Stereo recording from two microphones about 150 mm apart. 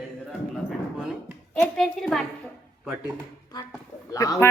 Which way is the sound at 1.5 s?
5° left (ahead or behind).